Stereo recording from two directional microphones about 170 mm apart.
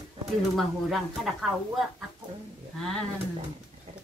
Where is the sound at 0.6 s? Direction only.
Centre (ahead or behind).